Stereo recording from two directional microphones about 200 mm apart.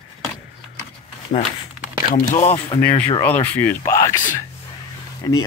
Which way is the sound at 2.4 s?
25° left (ahead or behind).